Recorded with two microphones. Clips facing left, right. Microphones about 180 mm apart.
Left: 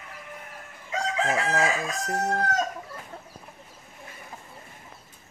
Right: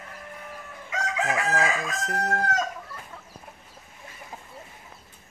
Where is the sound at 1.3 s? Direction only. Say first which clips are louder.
Right 1 dB; 20° left (ahead or behind).